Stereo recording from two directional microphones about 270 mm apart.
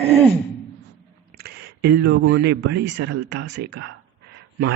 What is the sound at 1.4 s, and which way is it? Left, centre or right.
Speech, right.